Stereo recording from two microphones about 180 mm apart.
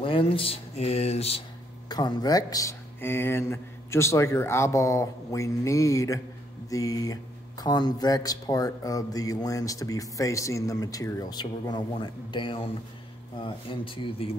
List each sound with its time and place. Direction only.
0.0 s speech: 30° left (ahead or behind)
1.9 s speech: 20° left (ahead or behind)